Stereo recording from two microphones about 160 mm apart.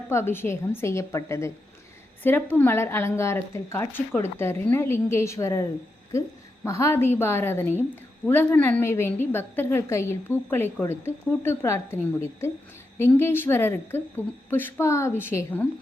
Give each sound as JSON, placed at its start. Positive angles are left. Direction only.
{"t": 0.1, "sound": "a woman's voice", "side_deg": 15}
{"t": 6.7, "sound": "a woman's voice", "side_deg": 15}